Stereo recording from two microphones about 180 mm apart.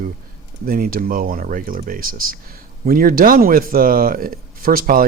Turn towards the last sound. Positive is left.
turn(degrees=-50)  # may be behind; listen again after turning